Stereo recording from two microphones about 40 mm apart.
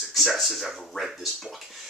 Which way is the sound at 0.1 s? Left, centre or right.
Centre.